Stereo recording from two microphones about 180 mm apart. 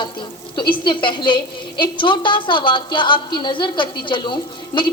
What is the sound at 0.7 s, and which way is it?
A woman's voice, 25° left (ahead or behind).